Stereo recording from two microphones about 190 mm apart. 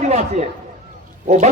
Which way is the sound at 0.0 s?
35° right (ahead or behind).